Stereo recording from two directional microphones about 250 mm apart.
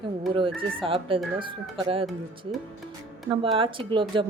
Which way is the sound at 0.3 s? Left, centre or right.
Right.